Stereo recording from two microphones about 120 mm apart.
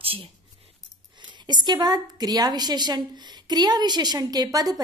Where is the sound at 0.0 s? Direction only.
50° right (ahead or behind).